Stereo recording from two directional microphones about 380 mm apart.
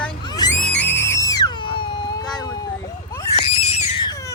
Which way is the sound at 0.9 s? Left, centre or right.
Centre.